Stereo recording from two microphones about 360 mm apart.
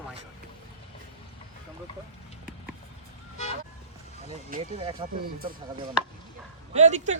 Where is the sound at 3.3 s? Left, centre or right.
Centre.